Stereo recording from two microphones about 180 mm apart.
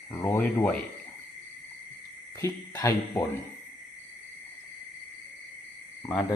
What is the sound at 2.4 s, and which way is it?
Speech, 20° left (ahead or behind).